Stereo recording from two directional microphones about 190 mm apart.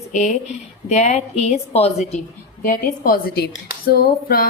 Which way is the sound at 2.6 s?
50° left (ahead or behind).